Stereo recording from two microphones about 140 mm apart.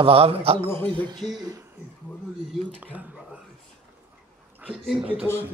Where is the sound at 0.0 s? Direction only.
40° right (ahead or behind).